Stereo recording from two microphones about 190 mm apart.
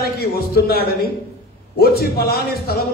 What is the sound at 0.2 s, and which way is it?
A man's voice, 55° left (ahead or behind).